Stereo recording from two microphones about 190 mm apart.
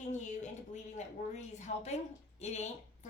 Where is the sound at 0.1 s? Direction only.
40° left (ahead or behind).